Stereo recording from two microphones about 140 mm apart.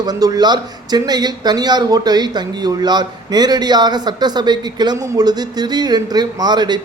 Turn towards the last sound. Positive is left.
turn(degrees=-30)  # may be behind; listen again after turning